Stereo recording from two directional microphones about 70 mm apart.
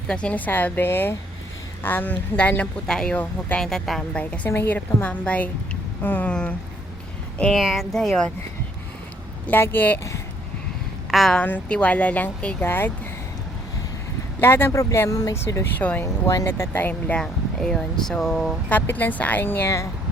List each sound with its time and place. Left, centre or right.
0.1 s speech: centre
2.8 s speech: centre
4.1 s speech: centre
4.4 s speech: left
7.5 s speech: centre
9.5 s speech: left
11.1 s a woman's voice: centre
11.3 s speech: centre
12.6 s speech: left
14.4 s speech: left
15.1 s speech: left
15.8 s speech: left
16.9 s speech: centre
18.7 s speech: left